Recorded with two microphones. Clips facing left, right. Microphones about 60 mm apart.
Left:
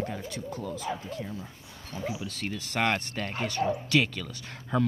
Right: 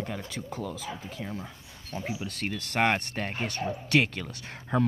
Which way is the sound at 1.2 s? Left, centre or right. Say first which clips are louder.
Right 1 dB; right.